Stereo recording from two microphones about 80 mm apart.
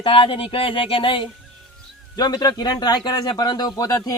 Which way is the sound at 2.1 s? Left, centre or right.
Left.